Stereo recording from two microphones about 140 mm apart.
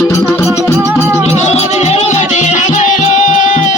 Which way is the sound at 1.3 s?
50° left (ahead or behind).